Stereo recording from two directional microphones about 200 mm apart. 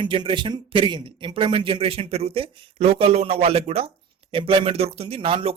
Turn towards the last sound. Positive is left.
turn(degrees=-25)  # may be behind; listen again after turning